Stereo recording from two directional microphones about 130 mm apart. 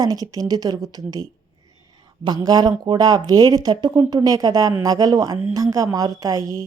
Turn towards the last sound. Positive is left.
turn(degrees=-25)  # may be behind; listen again after turning